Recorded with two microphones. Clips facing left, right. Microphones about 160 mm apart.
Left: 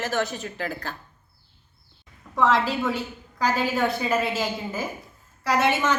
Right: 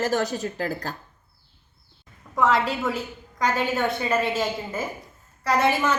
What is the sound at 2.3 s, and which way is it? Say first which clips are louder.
A woman's voice: even; centre (ahead or behind).